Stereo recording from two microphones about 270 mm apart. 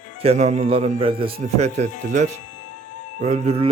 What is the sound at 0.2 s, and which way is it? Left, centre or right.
A man's voice, right.